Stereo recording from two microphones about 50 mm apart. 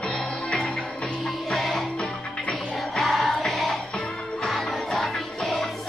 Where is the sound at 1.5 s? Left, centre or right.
Centre.